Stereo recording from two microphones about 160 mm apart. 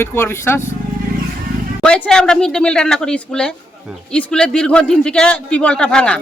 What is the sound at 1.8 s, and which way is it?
A man's voice, 5° left (ahead or behind).